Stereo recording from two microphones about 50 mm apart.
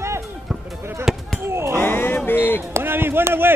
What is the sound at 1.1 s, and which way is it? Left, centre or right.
Speech, centre.